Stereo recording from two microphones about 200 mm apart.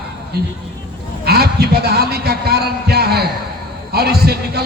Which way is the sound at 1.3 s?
50° right (ahead or behind).